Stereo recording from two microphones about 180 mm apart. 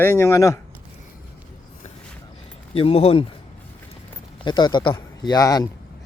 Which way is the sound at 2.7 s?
30° left (ahead or behind).